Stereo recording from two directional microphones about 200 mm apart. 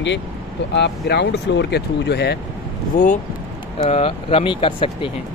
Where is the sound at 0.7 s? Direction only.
60° left (ahead or behind).